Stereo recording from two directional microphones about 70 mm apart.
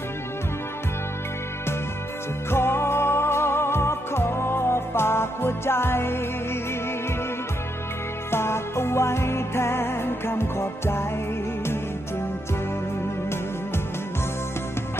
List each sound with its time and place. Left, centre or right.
2.5 s music: left
8.3 s music: left